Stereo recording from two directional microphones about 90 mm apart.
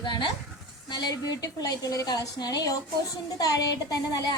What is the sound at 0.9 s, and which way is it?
A woman's voice, 50° left (ahead or behind).